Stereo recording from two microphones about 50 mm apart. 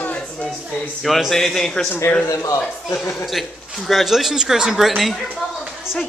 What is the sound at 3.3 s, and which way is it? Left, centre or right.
Speech, centre.